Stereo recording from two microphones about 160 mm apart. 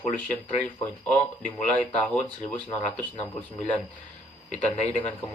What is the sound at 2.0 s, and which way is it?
Speech, 5° left (ahead or behind).